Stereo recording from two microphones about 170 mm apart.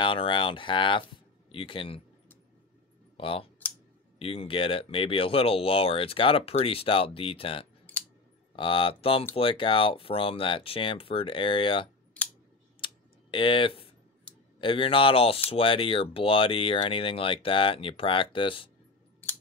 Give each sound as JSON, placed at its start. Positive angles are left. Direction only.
{"t": 0.0, "sound": "speech", "side_deg": 30}
{"t": 3.2, "sound": "speech", "side_deg": 30}
{"t": 12.8, "sound": "computer keyboard", "side_deg": 30}
{"t": 14.6, "sound": "speech", "side_deg": 30}